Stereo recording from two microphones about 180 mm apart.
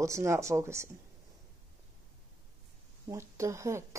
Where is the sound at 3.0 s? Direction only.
15° right (ahead or behind).